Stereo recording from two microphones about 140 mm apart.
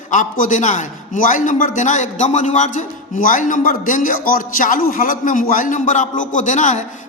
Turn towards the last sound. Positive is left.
turn(degrees=60)  # may be behind; listen again after turning